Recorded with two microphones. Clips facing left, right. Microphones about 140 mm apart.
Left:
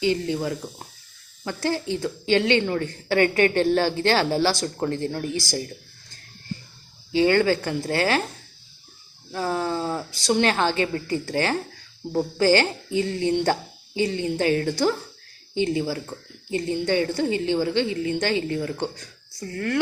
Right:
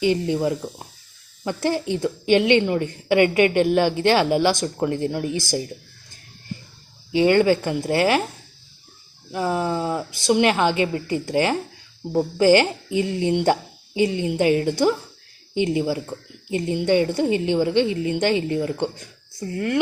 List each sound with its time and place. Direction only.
0.0 s a woman's voice: 20° right (ahead or behind)
7.1 s a woman's voice: 20° right (ahead or behind)
9.3 s a woman's voice: 20° right (ahead or behind)